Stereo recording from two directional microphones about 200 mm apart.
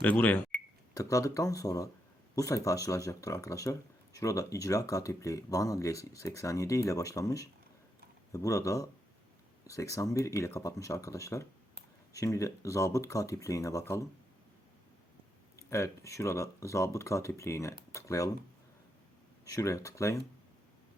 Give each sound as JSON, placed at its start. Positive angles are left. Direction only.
{"t": 0.0, "sound": "speech", "side_deg": 10}
{"t": 15.5, "sound": "speech", "side_deg": 15}
{"t": 19.5, "sound": "speech", "side_deg": 15}